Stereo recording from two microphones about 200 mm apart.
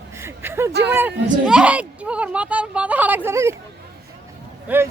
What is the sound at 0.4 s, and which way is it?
Speech, 10° right (ahead or behind).